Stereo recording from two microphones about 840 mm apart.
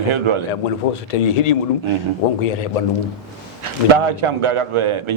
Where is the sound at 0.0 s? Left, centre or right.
Right.